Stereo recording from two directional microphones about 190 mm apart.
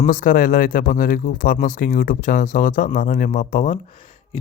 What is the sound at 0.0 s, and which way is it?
Speech, 45° left (ahead or behind).